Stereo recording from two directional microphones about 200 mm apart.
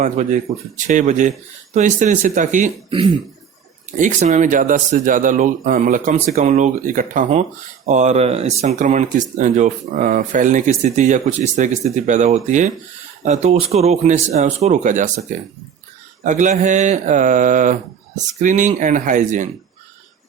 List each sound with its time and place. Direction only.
0.0 s speech: 35° right (ahead or behind)
3.9 s speech: 40° right (ahead or behind)